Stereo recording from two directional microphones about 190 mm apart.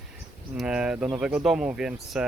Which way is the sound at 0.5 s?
5° right (ahead or behind).